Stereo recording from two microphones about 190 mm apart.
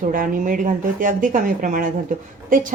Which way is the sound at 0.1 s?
45° right (ahead or behind).